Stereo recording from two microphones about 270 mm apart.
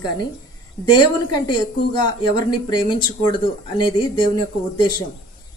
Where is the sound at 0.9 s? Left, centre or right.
Centre.